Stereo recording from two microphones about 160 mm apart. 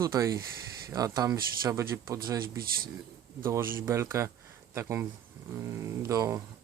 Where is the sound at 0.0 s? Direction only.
20° right (ahead or behind).